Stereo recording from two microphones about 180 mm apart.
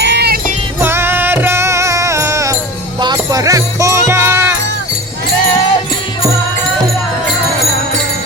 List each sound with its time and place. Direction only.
0.0 s music: 65° right (ahead or behind)
0.8 s music: 15° right (ahead or behind)